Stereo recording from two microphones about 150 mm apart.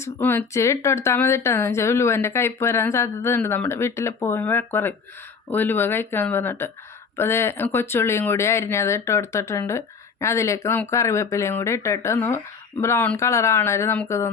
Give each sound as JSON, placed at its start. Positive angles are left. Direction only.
{"t": 0.0, "sound": "speech", "side_deg": 15}